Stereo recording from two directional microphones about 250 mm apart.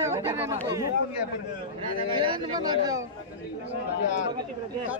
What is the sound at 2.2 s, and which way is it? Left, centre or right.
Speech, centre.